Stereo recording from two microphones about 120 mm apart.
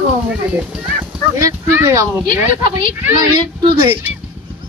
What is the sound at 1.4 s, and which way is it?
Speech, 20° right (ahead or behind).